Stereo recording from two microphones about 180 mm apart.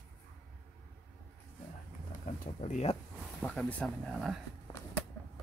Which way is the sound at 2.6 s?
40° left (ahead or behind).